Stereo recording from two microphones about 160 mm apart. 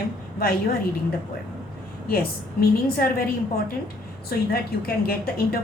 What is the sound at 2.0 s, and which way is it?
A woman's voice, 70° left (ahead or behind).